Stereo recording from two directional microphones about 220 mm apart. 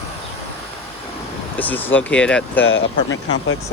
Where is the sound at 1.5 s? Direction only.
5° left (ahead or behind).